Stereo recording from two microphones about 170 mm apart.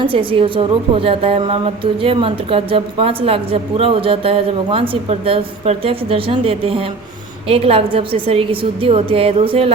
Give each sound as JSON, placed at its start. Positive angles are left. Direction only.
{"t": 0.0, "sound": "a woman's voice", "side_deg": -30}